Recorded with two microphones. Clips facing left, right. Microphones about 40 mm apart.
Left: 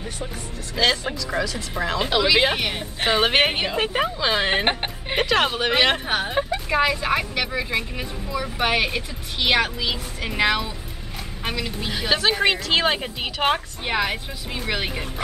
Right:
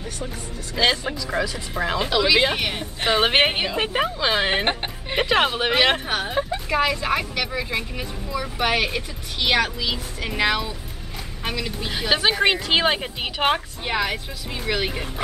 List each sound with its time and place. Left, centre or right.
0.8 s a woman's voice: centre
1.7 s a woman's voice: centre
4.6 s speech: centre
5.2 s a woman's voice: centre
6.0 s a woman's voice: centre
11.9 s speech: centre
13.8 s speech: centre